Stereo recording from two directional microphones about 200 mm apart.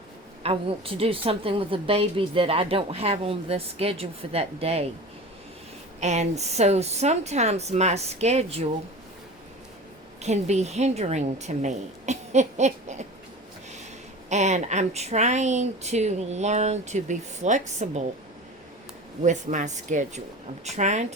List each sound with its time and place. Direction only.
0.4 s a woman's voice: 30° right (ahead or behind)
6.0 s speech: 35° right (ahead or behind)
10.2 s speech: 35° right (ahead or behind)
14.3 s speech: 35° right (ahead or behind)
19.2 s speech: 40° right (ahead or behind)